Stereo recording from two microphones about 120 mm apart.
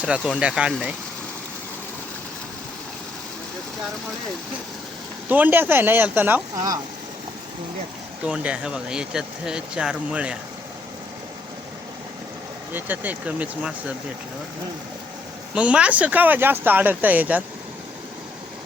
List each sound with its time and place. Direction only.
0.0 s speech: 10° right (ahead or behind)
5.3 s speech: 15° right (ahead or behind)
8.2 s speech: 10° right (ahead or behind)
12.7 s speech: 15° right (ahead or behind)
15.5 s speech: 10° right (ahead or behind)